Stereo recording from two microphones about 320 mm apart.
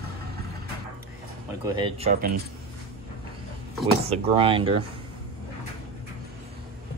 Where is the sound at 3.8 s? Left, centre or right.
Centre.